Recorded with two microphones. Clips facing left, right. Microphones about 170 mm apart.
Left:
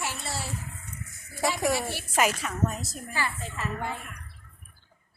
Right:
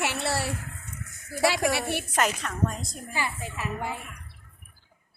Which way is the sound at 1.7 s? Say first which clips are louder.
Right 2 dB; 60° right (ahead or behind).